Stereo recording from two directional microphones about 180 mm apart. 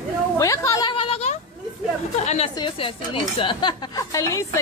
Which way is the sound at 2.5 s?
30° left (ahead or behind).